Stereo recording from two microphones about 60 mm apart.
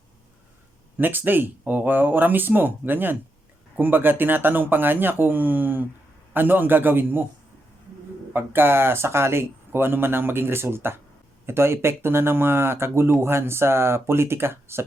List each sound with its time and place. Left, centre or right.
0.9 s speech: right
8.3 s speech: right